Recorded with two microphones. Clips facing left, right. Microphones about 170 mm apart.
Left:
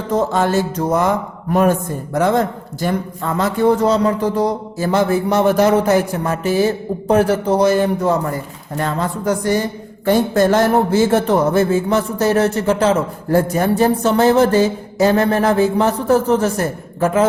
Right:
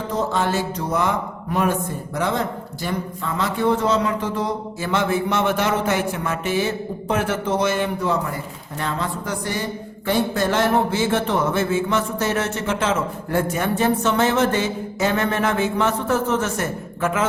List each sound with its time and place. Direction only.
0.3 s speech: 45° left (ahead or behind)